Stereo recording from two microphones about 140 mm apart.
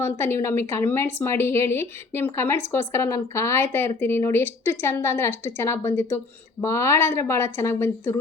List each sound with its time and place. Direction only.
0.0 s a woman's voice: 15° left (ahead or behind)